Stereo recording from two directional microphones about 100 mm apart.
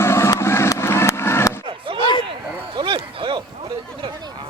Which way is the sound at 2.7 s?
60° right (ahead or behind).